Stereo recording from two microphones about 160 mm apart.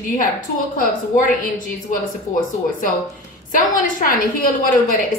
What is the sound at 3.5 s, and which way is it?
A woman's voice, 60° left (ahead or behind).